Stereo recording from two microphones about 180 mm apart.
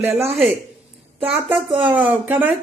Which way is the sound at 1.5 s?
30° right (ahead or behind).